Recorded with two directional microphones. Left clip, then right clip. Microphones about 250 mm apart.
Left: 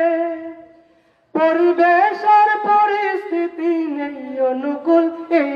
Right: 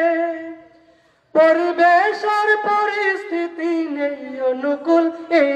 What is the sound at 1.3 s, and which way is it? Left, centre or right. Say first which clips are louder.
Music: right 1 dB; right.